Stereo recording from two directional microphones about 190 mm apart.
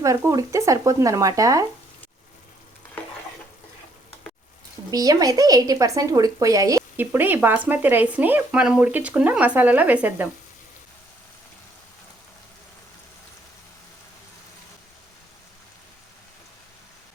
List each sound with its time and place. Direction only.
0.0 s speech: 15° right (ahead or behind)
4.9 s speech: 20° right (ahead or behind)